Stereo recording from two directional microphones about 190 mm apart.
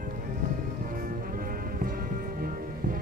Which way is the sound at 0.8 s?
50° right (ahead or behind).